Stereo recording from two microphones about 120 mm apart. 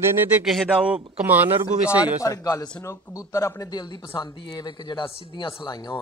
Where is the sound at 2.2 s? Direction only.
30° left (ahead or behind).